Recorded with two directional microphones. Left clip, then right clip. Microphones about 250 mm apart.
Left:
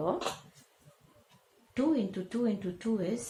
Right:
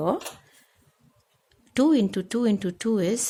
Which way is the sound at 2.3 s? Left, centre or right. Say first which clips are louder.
Right 8 dB; right.